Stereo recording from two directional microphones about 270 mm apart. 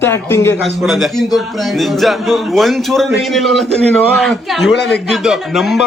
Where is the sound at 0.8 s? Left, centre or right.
Centre.